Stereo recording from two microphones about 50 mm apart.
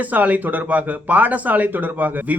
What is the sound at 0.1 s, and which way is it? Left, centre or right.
Speech, right.